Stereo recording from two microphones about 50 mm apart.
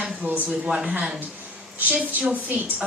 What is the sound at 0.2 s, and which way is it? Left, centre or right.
Speech, right.